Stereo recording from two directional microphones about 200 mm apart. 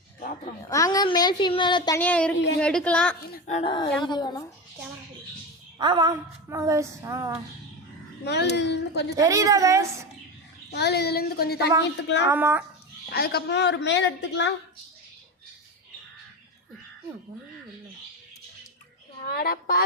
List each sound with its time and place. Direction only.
0.2 s a sound: 40° left (ahead or behind)
0.7 s a woman's voice: 15° left (ahead or behind)
2.0 s a woman's voice: 5° left (ahead or behind)
3.3 s speech: 35° left (ahead or behind)
3.6 s a woman's voice: 25° left (ahead or behind)
5.8 s a woman's voice: 20° right (ahead or behind)
8.2 s a woman's voice: 55° left (ahead or behind)
9.1 s a woman's voice: 15° right (ahead or behind)
10.7 s a child's voice: 55° left (ahead or behind)
12.3 s a woman's voice: 10° right (ahead or behind)
13.1 s a woman's voice: 50° left (ahead or behind)
19.3 s a child's voice: 50° left (ahead or behind)